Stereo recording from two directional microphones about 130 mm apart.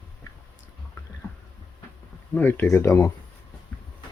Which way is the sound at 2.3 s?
15° left (ahead or behind).